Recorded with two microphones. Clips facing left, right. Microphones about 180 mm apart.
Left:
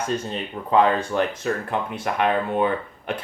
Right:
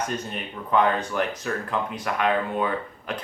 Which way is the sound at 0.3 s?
30° left (ahead or behind).